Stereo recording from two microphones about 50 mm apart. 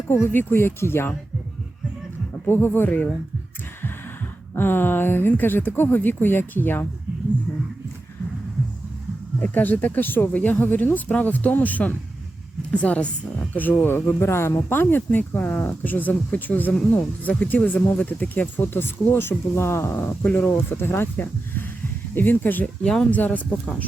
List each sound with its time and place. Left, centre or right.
0.3 s speech: left
2.5 s speech: left
4.5 s speech: left
9.4 s speech: left
10.6 s speech: left
13.5 s speech: left
15.8 s speech: left
17.8 s speech: left
20.2 s speech: left
20.5 s speech: left
22.6 s speech: left
23.1 s speech: left